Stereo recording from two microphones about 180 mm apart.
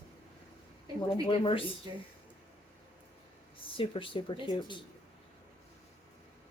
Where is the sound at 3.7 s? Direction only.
30° left (ahead or behind).